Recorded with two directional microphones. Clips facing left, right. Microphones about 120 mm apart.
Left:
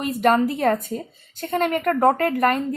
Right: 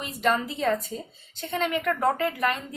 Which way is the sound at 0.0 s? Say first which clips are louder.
Left 7 dB; 50° left (ahead or behind).